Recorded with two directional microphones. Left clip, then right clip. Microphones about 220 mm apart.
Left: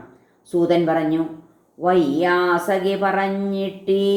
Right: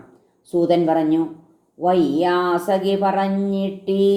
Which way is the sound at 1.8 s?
30° right (ahead or behind).